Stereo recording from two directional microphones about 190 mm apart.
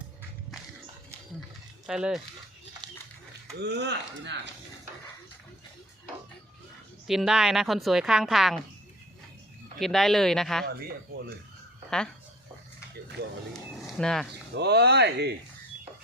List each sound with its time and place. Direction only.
1.9 s a woman's voice: 5° right (ahead or behind)
3.6 s speech: 65° right (ahead or behind)
7.1 s a woman's voice: 5° right (ahead or behind)
9.7 s a woman's voice: centre (ahead or behind)
11.9 s speech: 5° left (ahead or behind)
14.0 s a woman's voice: 5° left (ahead or behind)
14.5 s speech: 60° right (ahead or behind)